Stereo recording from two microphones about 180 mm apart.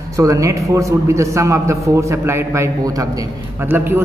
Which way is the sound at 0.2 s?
15° right (ahead or behind).